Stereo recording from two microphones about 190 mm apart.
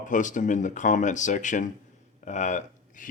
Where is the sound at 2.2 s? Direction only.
40° left (ahead or behind).